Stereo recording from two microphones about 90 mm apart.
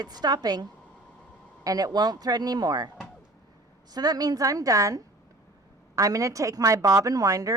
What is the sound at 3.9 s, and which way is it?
A woman's voice, 45° right (ahead or behind).